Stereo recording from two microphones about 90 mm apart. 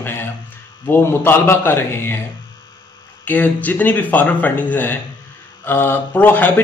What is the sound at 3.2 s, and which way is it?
Speech, 20° left (ahead or behind).